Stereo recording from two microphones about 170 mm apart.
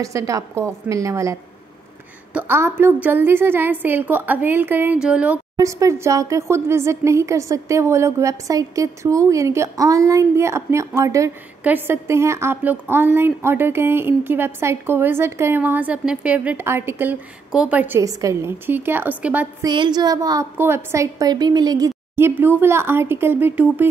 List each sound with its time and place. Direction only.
0.0 s a woman's voice: 20° right (ahead or behind)
2.3 s speech: 10° right (ahead or behind)
5.6 s speech: 20° right (ahead or behind)
19.6 s speech: 25° right (ahead or behind); by 23.9 s 10° right (ahead or behind)